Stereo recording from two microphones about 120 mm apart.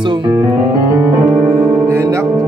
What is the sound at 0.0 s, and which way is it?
Speech, 40° right (ahead or behind).